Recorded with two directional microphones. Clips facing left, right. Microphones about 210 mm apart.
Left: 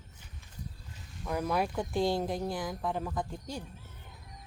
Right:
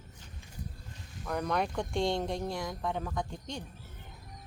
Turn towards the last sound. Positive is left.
turn(degrees=5)  # may be behind; listen again after turning